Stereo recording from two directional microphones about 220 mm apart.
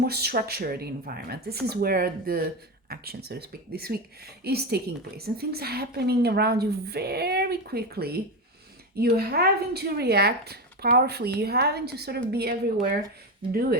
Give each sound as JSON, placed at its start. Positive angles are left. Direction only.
{"t": 0.0, "sound": "speech", "side_deg": -45}